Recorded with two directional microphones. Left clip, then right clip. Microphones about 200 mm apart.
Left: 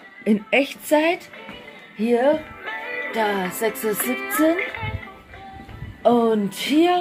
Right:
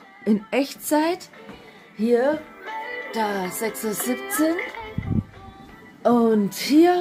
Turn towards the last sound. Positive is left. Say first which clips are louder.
# right 1 dB
turn(degrees=-30)  # may be behind; listen again after turning